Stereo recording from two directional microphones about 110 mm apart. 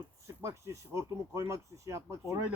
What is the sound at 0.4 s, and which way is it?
Speech, 25° right (ahead or behind).